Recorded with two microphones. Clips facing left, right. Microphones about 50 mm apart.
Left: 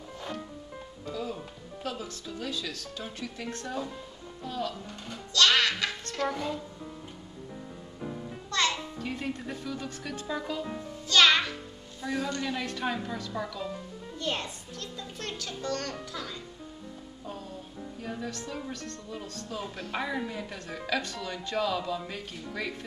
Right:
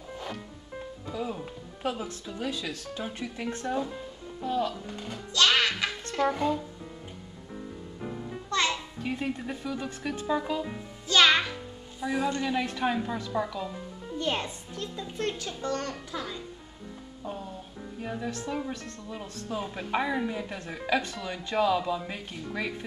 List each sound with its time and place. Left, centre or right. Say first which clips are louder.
1.0 s a woman's voice: right 1 dB; centre
8.0 s music: right 1 dB; centre
9.0 s a woman's voice: right 4 dB; centre
17.2 s music: right 4 dB; centre
18.0 s a woman's voice: right 3 dB; centre